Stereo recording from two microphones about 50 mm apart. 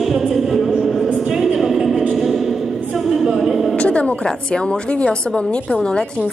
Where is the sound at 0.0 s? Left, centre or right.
Centre.